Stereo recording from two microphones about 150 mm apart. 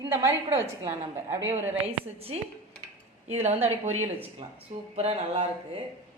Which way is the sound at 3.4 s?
45° right (ahead or behind).